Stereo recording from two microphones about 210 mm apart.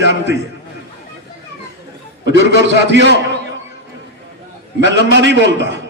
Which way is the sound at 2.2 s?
55° right (ahead or behind).